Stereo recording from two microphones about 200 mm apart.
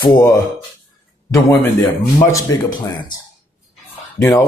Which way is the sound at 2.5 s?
90° left.